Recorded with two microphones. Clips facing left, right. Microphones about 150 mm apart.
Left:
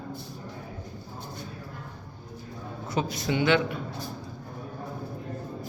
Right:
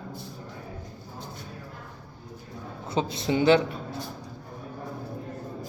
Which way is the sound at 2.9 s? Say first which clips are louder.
Right 2 dB; 25° right (ahead or behind).